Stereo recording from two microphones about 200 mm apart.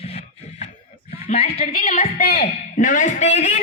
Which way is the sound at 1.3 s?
35° left (ahead or behind).